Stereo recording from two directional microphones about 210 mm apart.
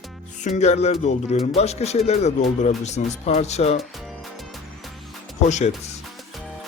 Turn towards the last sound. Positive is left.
turn(degrees=35)  # may be behind; listen again after turning